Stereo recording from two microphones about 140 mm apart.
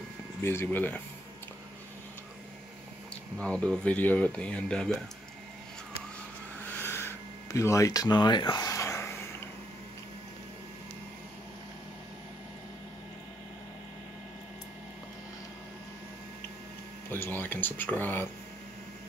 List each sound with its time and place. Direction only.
0.4 s speech: 15° left (ahead or behind)
3.3 s speech: 5° left (ahead or behind)
6.8 s a sound: 15° left (ahead or behind)
17.1 s speech: 15° left (ahead or behind)